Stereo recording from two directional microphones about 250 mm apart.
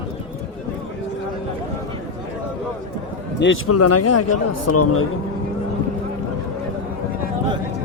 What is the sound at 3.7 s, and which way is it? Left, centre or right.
A man's voice, left.